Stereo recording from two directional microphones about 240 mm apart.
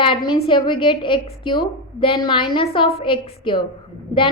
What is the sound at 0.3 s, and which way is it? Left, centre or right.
A woman's voice, left.